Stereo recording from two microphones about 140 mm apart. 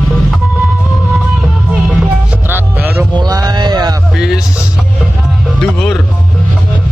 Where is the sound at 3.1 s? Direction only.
30° right (ahead or behind).